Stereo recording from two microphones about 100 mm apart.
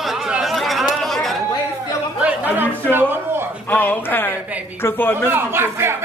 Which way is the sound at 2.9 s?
20° right (ahead or behind).